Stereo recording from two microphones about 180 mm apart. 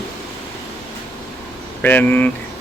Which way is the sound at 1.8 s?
10° left (ahead or behind).